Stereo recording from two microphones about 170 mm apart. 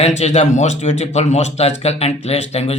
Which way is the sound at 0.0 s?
40° left (ahead or behind).